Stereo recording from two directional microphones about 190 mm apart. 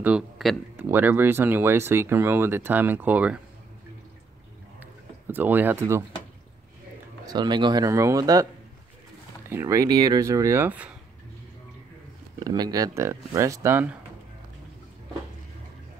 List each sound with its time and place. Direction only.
0.0 s speech: 5° right (ahead or behind)
5.2 s speech: 10° right (ahead or behind)
7.2 s speech: 25° right (ahead or behind)
9.5 s speech: 15° right (ahead or behind)
12.4 s speech: 20° right (ahead or behind)